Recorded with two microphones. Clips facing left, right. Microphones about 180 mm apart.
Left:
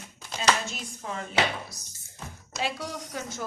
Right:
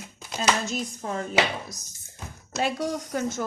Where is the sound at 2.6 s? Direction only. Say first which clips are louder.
Right 5 dB; 50° right (ahead or behind).